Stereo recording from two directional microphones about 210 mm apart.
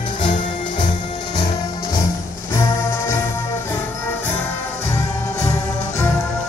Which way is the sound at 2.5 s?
15° left (ahead or behind).